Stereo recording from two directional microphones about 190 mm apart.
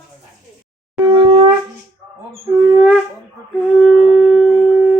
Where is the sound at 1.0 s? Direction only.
25° right (ahead or behind).